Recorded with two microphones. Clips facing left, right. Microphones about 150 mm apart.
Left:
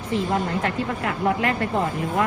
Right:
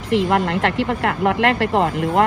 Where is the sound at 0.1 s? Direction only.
85° right.